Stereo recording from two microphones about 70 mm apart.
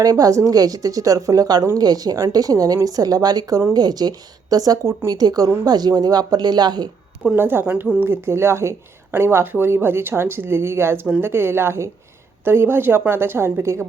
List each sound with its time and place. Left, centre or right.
0.0 s a woman's voice: right
7.3 s a woman's voice: right